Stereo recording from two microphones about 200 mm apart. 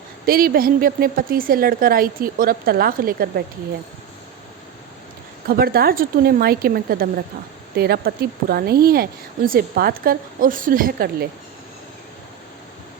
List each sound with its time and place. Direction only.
0.3 s speech: 45° right (ahead or behind)
5.5 s speech: 50° right (ahead or behind)